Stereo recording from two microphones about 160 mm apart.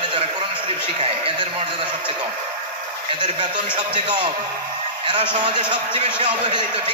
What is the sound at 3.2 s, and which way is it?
A man's voice, 30° right (ahead or behind).